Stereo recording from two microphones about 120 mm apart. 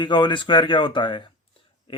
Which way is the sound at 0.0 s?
40° left (ahead or behind).